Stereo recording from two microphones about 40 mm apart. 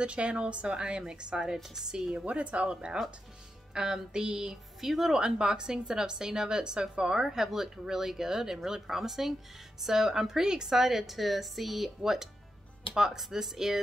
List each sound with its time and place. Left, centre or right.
0.0 s a woman's voice: right
2.1 s a woman's voice: right
4.7 s a woman's voice: centre
5.2 s a woman's voice: centre